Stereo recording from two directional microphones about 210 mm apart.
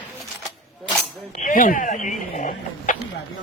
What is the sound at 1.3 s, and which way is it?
Speech, 40° left (ahead or behind).